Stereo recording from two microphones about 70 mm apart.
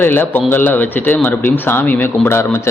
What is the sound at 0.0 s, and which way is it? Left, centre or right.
A man's voice, left.